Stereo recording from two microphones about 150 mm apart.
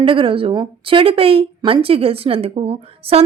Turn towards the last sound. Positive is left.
turn(degrees=-40)  # may be behind; listen again after turning